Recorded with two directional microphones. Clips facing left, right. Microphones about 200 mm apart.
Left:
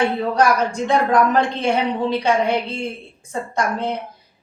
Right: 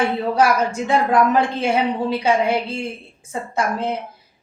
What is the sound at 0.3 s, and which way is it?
Speech, 5° right (ahead or behind).